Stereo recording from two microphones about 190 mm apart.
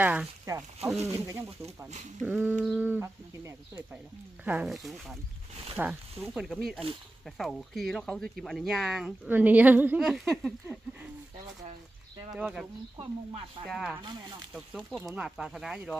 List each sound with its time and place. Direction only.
0.0 s speech: 10° right (ahead or behind)
12.3 s speech: 5° right (ahead or behind)
13.0 s speech: 25° right (ahead or behind)
13.7 s speech: 5° right (ahead or behind)
14.0 s speech: 25° right (ahead or behind)
14.5 s speech: centre (ahead or behind)